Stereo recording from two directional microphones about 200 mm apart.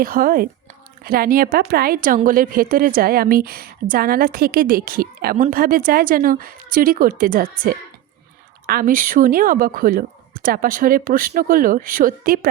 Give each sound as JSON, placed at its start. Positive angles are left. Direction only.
{"t": 0.0, "sound": "a woman's voice", "side_deg": -45}